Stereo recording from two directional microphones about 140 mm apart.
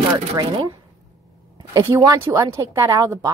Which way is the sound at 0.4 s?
30° right (ahead or behind).